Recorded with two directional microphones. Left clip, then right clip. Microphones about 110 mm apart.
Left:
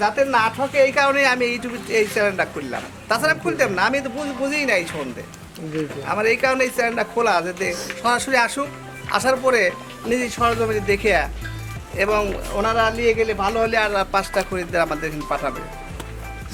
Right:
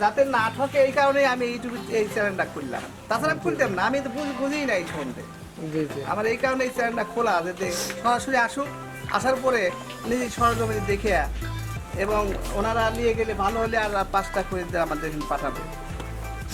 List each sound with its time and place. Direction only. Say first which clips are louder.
0.0 s a woman's voice: left 3 dB; 10° left (ahead or behind)
6.1 s a woman's voice: left 7 dB; 15° left (ahead or behind)
7.7 s speech: left 2 dB; 15° right (ahead or behind)
8.0 s a woman's voice: left 4 dB; 10° left (ahead or behind)